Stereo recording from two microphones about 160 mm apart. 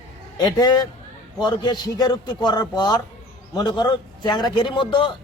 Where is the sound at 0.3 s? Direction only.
25° left (ahead or behind).